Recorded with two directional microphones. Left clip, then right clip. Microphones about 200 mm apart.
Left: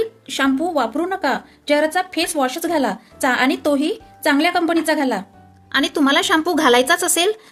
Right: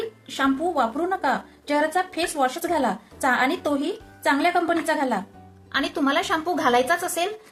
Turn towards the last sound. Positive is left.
turn(degrees=50)  # may be behind; listen again after turning